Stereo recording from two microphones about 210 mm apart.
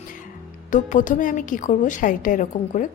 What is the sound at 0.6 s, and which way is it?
A woman's voice, 35° left (ahead or behind).